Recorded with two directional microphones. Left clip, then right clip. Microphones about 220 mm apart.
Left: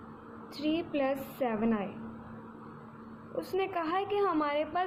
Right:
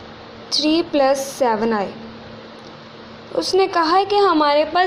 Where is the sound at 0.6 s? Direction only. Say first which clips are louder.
Right 14 dB; 25° right (ahead or behind).